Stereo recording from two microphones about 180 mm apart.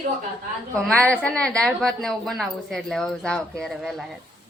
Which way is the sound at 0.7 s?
5° left (ahead or behind).